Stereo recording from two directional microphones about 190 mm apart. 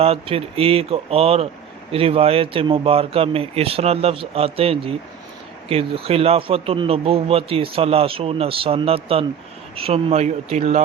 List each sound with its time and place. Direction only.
0.0 s speech: 30° right (ahead or behind)